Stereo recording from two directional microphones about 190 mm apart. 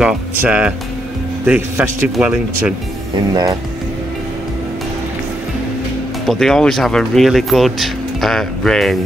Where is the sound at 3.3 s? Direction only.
20° right (ahead or behind).